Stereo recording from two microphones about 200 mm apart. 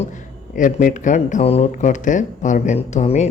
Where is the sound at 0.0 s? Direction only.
40° left (ahead or behind).